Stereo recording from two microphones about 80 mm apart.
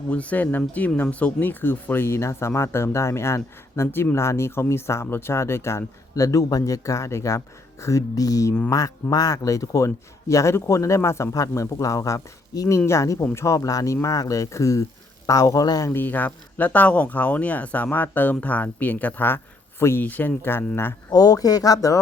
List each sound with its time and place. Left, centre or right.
0.1 s a man's voice: centre; by 15.9 s left
15.9 s speech: left
21.1 s a man's voice: left